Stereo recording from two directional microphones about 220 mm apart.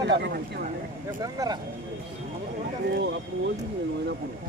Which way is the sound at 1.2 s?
15° right (ahead or behind).